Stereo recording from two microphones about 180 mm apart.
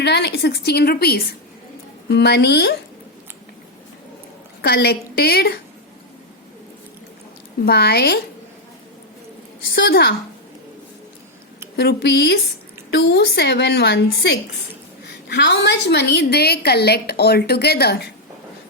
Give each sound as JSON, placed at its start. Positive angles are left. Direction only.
{"t": 0.0, "sound": "a woman's voice", "side_deg": 65}
{"t": 4.6, "sound": "a woman's voice", "side_deg": 60}
{"t": 7.6, "sound": "a woman's voice", "side_deg": 65}
{"t": 9.7, "sound": "a woman's voice", "side_deg": 75}
{"t": 11.8, "sound": "a woman's voice", "side_deg": 65}